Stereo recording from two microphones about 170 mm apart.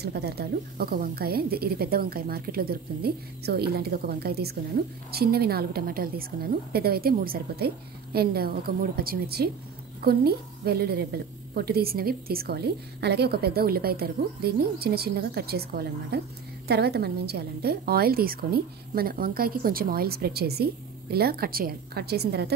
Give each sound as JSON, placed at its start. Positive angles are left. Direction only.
{"t": 0.0, "sound": "a woman's voice", "side_deg": -70}